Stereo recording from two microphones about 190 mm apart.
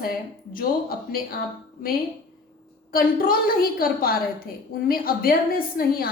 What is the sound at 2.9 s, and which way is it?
A woman's voice, 50° left (ahead or behind).